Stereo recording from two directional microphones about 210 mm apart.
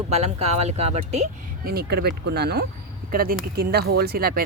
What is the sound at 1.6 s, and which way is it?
Speech, 45° right (ahead or behind).